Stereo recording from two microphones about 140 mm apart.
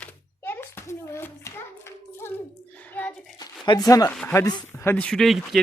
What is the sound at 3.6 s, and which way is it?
Speech, 25° left (ahead or behind).